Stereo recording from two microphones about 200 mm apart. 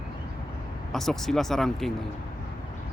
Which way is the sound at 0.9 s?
Centre (ahead or behind).